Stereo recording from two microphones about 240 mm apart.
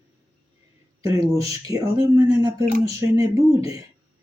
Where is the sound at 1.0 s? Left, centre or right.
Centre.